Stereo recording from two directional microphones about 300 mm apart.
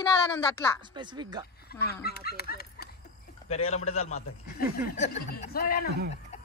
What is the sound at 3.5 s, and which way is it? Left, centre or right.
Speech, left.